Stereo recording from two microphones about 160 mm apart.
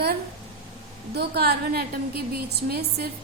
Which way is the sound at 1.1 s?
90° right.